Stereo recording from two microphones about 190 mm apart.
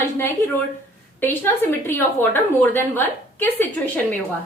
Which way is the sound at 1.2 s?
10° left (ahead or behind).